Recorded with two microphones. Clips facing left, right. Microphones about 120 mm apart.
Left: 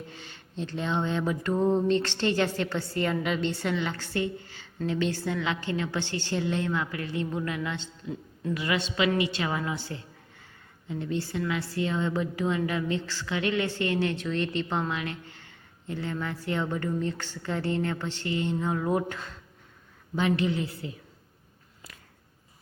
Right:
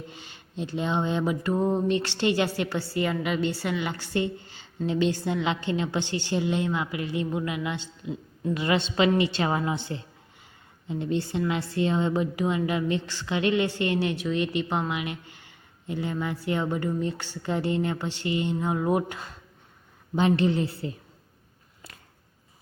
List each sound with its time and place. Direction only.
0.1 s a woman's voice: 15° right (ahead or behind)
8.5 s a woman's voice: 30° right (ahead or behind)
20.1 s a woman's voice: 30° right (ahead or behind)